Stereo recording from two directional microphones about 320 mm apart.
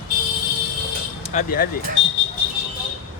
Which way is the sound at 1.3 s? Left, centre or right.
Left.